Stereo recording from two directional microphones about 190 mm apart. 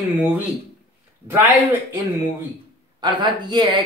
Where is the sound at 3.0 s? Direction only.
25° right (ahead or behind).